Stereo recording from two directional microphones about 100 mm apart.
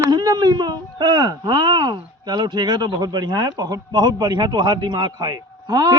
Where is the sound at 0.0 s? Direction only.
40° right (ahead or behind).